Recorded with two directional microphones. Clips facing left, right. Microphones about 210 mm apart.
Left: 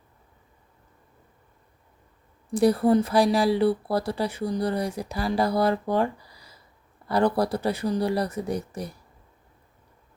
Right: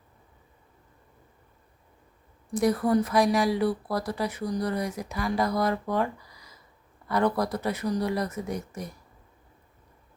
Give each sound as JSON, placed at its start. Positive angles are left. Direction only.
{"t": 2.5, "sound": "speech", "side_deg": 30}